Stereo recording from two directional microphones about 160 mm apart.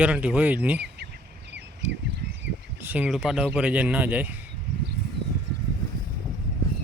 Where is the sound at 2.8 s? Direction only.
10° right (ahead or behind).